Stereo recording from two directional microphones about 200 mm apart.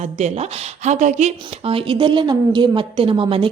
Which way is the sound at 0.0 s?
35° right (ahead or behind).